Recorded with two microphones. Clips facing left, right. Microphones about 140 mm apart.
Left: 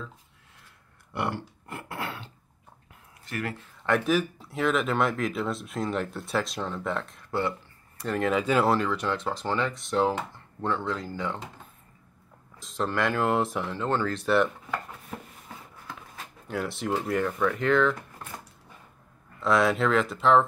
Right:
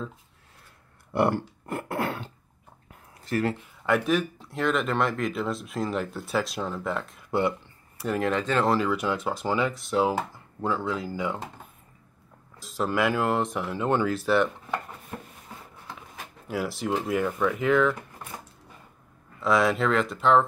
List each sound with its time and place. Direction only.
1.1 s a sound: 40° right (ahead or behind)
3.3 s speech: 30° right (ahead or behind)
3.8 s speech: centre (ahead or behind)
7.2 s speech: 15° right (ahead or behind)
8.0 s speech: centre (ahead or behind)
12.5 s speech: 5° right (ahead or behind)
13.7 s speech: 15° right (ahead or behind)
16.4 s speech: 5° right (ahead or behind)
19.4 s speech: centre (ahead or behind)